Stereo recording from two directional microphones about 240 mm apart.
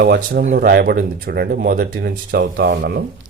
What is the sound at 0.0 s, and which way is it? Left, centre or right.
Speech, right.